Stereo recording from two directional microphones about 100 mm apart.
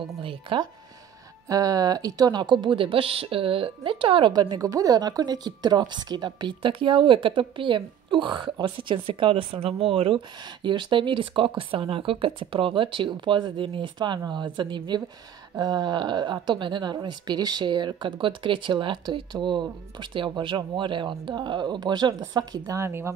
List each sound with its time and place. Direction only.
0.0 s speech: 60° right (ahead or behind)
1.5 s speech: 35° right (ahead or behind); by 4.3 s 60° right (ahead or behind)
4.3 s speech: 40° right (ahead or behind)